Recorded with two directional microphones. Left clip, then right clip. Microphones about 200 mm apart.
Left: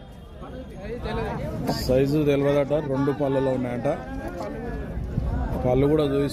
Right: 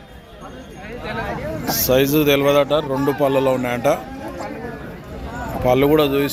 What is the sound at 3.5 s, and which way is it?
Speech, 10° right (ahead or behind).